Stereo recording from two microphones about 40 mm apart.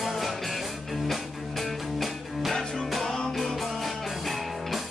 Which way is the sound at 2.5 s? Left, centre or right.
Centre.